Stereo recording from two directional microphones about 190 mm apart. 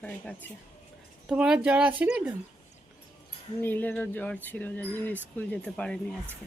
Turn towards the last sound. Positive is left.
turn(degrees=5)  # may be behind; listen again after turning